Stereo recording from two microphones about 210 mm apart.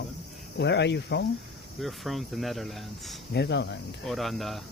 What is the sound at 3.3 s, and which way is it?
Speech, 55° left (ahead or behind).